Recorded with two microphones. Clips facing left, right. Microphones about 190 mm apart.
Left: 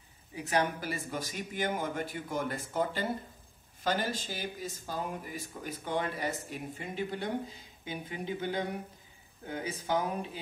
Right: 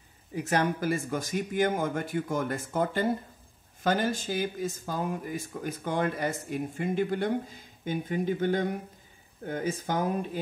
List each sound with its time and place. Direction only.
0.4 s speech: 45° right (ahead or behind)